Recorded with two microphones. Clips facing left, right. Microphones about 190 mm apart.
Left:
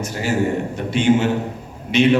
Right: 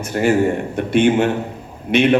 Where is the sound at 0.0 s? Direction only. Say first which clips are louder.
Right 5 dB; 55° right (ahead or behind).